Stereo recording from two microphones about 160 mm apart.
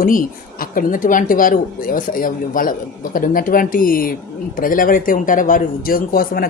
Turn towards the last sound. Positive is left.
turn(degrees=65)  # may be behind; listen again after turning